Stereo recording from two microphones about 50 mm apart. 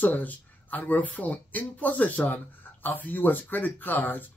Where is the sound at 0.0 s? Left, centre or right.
Left.